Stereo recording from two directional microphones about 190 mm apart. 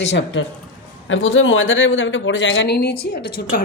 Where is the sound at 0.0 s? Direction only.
70° left (ahead or behind).